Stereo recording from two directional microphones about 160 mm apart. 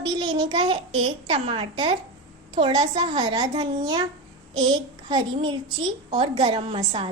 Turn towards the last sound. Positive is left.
turn(degrees=-35)  # may be behind; listen again after turning